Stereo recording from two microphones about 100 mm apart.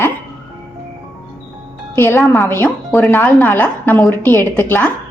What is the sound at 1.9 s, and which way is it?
A woman's voice, 25° left (ahead or behind).